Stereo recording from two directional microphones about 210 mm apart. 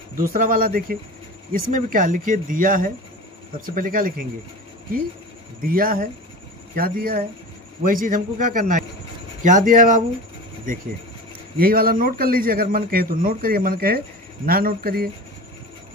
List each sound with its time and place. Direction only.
0.3 s a man's voice: 40° right (ahead or behind)
5.6 s a man's voice: 45° right (ahead or behind)
11.5 s a man's voice: 45° right (ahead or behind)